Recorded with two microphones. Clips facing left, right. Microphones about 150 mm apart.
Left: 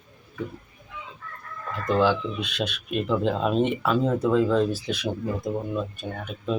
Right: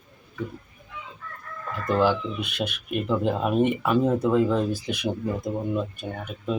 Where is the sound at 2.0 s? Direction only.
10° right (ahead or behind).